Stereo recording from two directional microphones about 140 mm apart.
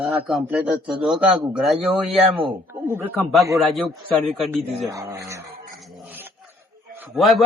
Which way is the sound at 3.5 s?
Centre (ahead or behind).